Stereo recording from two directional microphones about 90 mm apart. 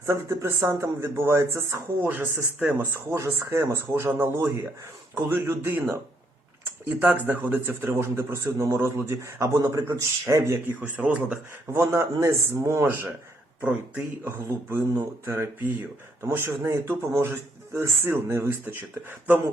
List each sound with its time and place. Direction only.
0.0 s a man's voice: 30° right (ahead or behind)
2.3 s speech: 5° right (ahead or behind)
2.7 s a man's voice: 30° right (ahead or behind)
10.8 s speech: 15° right (ahead or behind)
11.7 s a man's voice: 30° right (ahead or behind)
14.3 s a man's voice: 30° right (ahead or behind)